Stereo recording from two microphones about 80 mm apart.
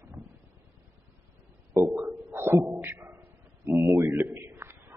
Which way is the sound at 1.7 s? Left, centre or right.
Right.